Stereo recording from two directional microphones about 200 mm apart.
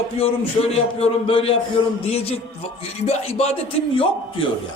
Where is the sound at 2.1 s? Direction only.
30° left (ahead or behind).